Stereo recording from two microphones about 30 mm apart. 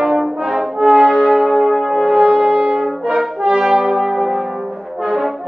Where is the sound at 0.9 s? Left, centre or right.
Right.